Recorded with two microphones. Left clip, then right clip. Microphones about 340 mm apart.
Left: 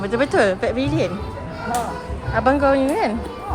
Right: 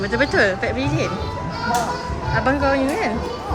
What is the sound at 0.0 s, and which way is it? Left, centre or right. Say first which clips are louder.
Speech: even; centre.